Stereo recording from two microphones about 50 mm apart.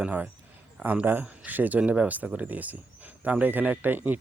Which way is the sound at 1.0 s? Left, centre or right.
Right.